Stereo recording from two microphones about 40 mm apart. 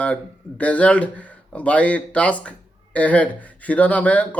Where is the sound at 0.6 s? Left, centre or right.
Left.